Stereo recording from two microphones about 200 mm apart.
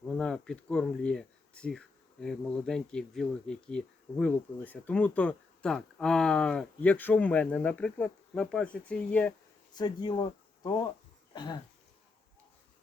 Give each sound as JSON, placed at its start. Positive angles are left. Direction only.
{"t": 0.2, "sound": "speech", "side_deg": 5}
{"t": 9.7, "sound": "speech", "side_deg": 20}